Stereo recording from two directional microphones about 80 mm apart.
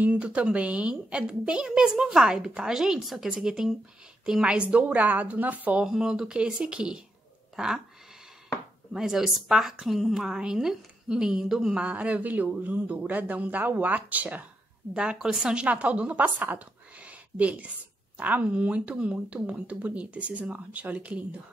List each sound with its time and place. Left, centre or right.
0.0 s a woman's voice: centre
5.9 s a woman's voice: centre
8.9 s a woman's voice: centre
15.0 s a woman's voice: centre